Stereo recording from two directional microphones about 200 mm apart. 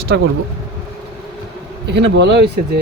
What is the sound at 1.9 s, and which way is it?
Speech, 60° right (ahead or behind).